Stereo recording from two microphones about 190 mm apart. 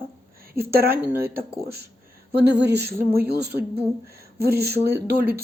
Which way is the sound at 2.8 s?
10° right (ahead or behind).